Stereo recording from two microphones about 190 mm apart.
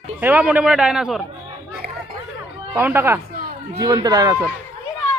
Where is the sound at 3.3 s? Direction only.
50° right (ahead or behind).